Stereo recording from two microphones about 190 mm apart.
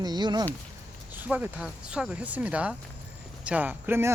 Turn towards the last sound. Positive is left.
turn(degrees=-10)  # may be behind; listen again after turning